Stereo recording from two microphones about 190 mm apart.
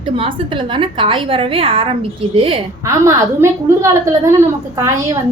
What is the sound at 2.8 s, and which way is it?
A woman's voice, 15° right (ahead or behind).